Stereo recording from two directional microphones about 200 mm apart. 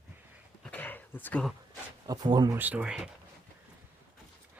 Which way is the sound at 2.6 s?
5° right (ahead or behind).